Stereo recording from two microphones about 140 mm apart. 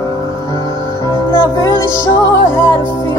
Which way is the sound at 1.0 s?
25° left (ahead or behind).